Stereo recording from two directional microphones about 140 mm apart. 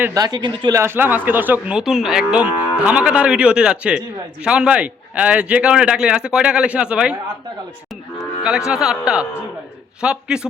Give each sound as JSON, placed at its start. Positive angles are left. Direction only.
{"t": 0.0, "sound": "speech", "side_deg": -25}
{"t": 0.8, "sound": "speech", "side_deg": -15}
{"t": 8.4, "sound": "speech", "side_deg": -5}